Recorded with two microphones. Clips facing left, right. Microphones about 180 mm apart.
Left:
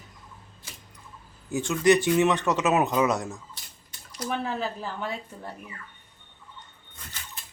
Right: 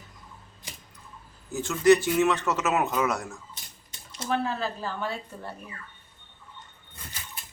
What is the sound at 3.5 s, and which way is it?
Bathtub, 20° right (ahead or behind).